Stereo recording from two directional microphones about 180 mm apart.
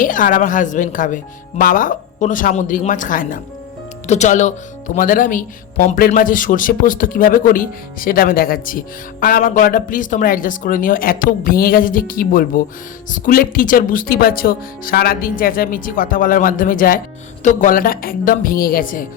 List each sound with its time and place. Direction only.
0.0 s speech: 45° left (ahead or behind)